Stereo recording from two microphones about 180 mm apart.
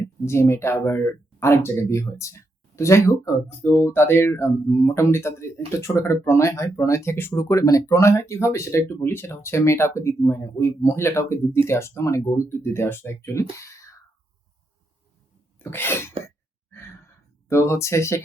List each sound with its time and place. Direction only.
0.0 s speech: 15° left (ahead or behind)
15.5 s sneeze: 10° left (ahead or behind)
17.5 s speech: 15° left (ahead or behind)